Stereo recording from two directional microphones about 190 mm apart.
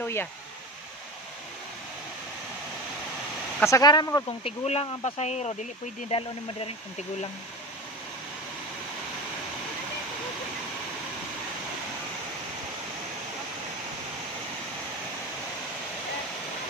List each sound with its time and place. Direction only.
0.0 s speech: 10° left (ahead or behind)
3.6 s speech: 20° left (ahead or behind)
4.5 s speech: 35° left (ahead or behind)